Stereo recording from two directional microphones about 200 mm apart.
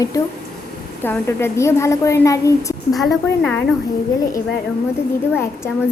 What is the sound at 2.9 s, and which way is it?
Speech, 5° left (ahead or behind).